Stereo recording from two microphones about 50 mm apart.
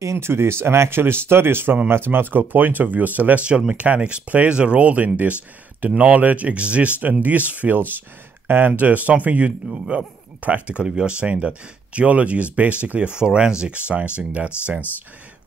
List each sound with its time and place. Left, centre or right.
0.0 s speech: right
3.4 s a man's voice: right
13.2 s speech: centre